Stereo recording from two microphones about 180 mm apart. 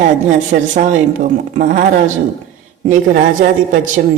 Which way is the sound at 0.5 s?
45° right (ahead or behind).